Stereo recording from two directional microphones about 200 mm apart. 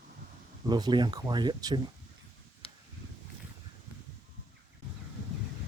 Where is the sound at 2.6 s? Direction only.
30° left (ahead or behind).